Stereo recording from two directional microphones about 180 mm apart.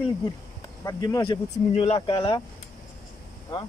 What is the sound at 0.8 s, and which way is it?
Speech, 20° left (ahead or behind).